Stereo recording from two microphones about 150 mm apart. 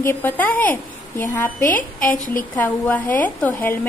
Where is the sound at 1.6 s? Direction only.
65° left (ahead or behind).